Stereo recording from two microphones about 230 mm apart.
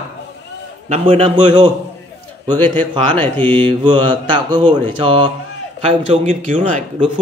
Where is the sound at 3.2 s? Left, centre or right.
Centre.